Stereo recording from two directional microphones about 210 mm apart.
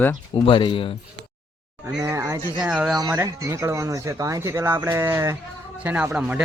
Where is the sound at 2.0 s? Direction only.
15° right (ahead or behind).